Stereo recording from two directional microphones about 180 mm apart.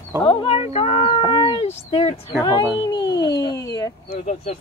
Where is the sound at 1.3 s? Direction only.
30° left (ahead or behind).